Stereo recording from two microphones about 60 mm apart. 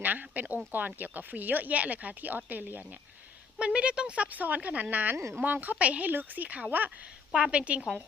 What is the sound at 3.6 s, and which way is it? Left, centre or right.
Speech, centre.